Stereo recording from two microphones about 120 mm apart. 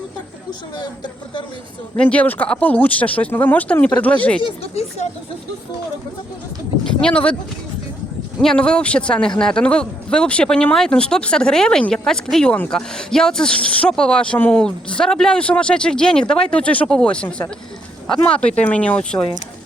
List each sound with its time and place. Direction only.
0.8 s speech: 40° left (ahead or behind)
2.0 s speech: 10° left (ahead or behind)
4.4 s speech: 60° left (ahead or behind)
6.8 s speech: 10° left (ahead or behind)
8.4 s speech: 5° left (ahead or behind)